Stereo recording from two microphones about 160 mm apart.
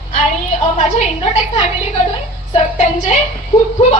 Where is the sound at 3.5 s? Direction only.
35° left (ahead or behind).